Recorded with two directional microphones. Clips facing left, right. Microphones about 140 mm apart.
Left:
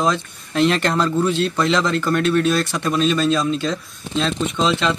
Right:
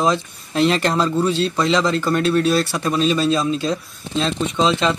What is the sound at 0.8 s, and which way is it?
Speech, 25° right (ahead or behind).